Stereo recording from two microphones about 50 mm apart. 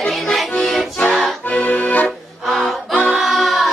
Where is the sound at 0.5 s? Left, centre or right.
Centre.